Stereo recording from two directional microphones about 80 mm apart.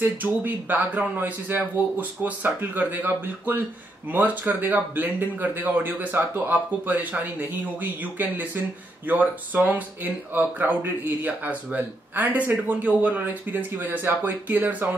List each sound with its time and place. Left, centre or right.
0.0 s speech: right